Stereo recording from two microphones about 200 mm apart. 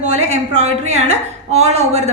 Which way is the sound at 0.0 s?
35° right (ahead or behind).